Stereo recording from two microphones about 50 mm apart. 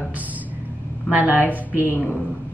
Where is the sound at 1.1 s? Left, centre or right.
Right.